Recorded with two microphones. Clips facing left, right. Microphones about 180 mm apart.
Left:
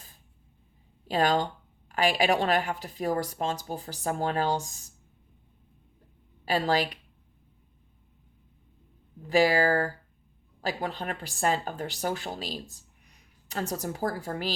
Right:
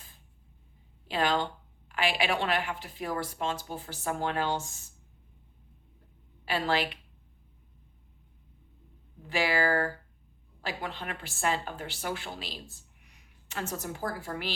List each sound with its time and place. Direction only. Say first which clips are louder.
1.0 s a woman's voice: left 3 dB; 40° left (ahead or behind)
6.4 s a woman's voice: left 3 dB; 40° left (ahead or behind)
9.2 s a woman's voice: left 6 dB; 40° left (ahead or behind)